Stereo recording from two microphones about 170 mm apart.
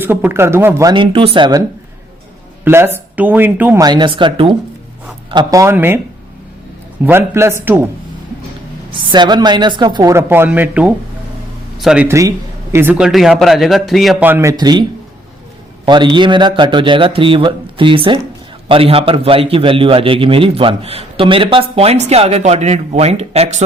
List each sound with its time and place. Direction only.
0.0 s speech: 10° right (ahead or behind)
2.6 s speech: 15° right (ahead or behind)
3.8 s speech: 25° right (ahead or behind)
7.0 s speech: 15° right (ahead or behind)
9.1 s a man's voice: 25° right (ahead or behind); by 12.0 s 5° right (ahead or behind)
12.0 s a man's voice: 20° right (ahead or behind); by 14.3 s centre (ahead or behind)
14.3 s speech: 15° right (ahead or behind)
14.5 s speech: 25° right (ahead or behind)
16.1 s a man's voice: 30° right (ahead or behind)